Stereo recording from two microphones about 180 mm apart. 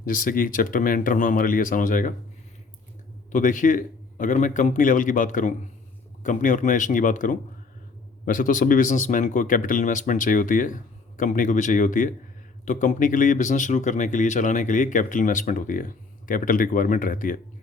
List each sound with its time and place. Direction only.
0.0 s speech: 50° left (ahead or behind)
3.3 s speech: 45° left (ahead or behind)